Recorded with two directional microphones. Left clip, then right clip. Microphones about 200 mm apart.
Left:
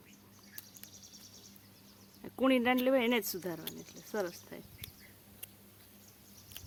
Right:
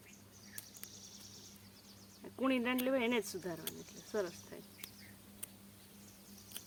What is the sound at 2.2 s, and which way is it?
Speech, 50° left (ahead or behind).